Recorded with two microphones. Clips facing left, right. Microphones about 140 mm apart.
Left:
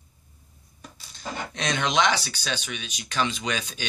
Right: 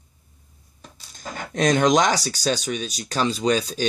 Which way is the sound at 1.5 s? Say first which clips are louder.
Right 8 dB; 45° right (ahead or behind).